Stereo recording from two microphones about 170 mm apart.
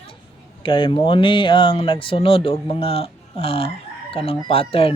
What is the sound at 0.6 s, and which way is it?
Speech, 30° left (ahead or behind).